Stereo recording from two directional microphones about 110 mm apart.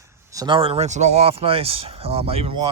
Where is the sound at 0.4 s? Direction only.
55° right (ahead or behind).